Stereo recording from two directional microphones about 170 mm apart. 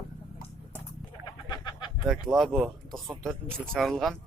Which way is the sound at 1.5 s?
25° left (ahead or behind).